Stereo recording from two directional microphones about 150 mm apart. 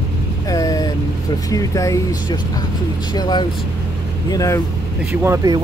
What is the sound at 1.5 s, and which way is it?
Speech, 20° left (ahead or behind).